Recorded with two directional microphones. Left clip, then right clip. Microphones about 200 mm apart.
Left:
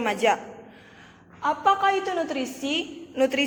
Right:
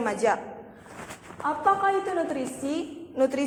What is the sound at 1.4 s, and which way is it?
A woman's voice, 15° left (ahead or behind).